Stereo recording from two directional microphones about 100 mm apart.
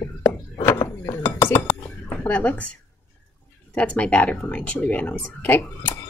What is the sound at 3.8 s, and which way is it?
A child's voice, 15° left (ahead or behind).